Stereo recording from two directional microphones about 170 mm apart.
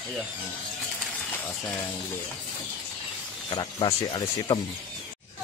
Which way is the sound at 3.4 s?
25° left (ahead or behind).